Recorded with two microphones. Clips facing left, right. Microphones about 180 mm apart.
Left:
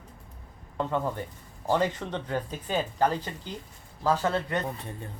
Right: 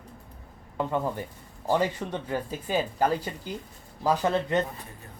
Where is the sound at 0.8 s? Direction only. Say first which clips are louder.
Right 1 dB; 10° right (ahead or behind).